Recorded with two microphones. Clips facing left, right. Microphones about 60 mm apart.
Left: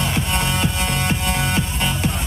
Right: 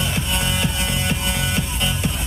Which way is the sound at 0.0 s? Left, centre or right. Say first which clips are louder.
Left 2 dB; left.